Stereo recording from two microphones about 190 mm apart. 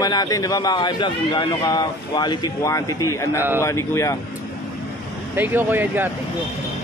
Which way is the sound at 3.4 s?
10° right (ahead or behind).